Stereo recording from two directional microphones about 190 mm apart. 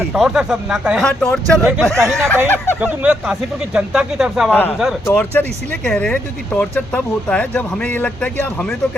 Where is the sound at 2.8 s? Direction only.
5° right (ahead or behind).